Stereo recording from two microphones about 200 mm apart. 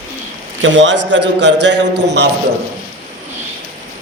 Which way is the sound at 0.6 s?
70° right (ahead or behind).